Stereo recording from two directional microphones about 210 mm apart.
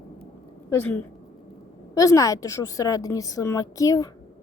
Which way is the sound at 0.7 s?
10° left (ahead or behind).